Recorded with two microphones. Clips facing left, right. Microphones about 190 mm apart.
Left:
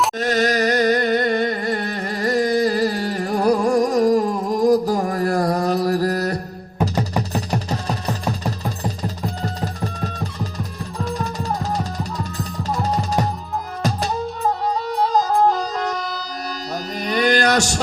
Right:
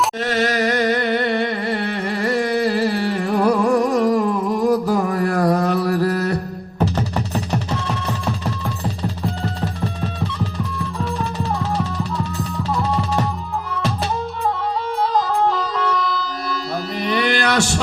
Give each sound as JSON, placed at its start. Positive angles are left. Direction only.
{"t": 0.2, "sound": "music", "side_deg": 40}
{"t": 7.7, "sound": "music", "side_deg": 40}
{"t": 15.0, "sound": "music", "side_deg": 40}
{"t": 17.0, "sound": "a sound", "side_deg": 40}